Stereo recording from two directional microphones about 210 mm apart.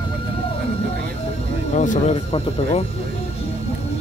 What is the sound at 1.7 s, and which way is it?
Speech, 35° left (ahead or behind).